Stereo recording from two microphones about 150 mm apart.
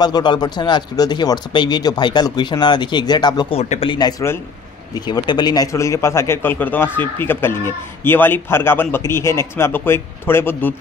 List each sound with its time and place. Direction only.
0.0 s speech: 30° left (ahead or behind)
3.5 s speech: 50° left (ahead or behind)
3.8 s a man's voice: 30° left (ahead or behind); by 10.7 s 15° left (ahead or behind)